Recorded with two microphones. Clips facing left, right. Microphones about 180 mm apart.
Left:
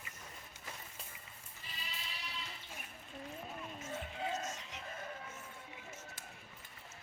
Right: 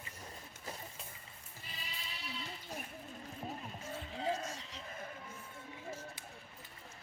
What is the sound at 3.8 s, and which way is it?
Music, 35° right (ahead or behind).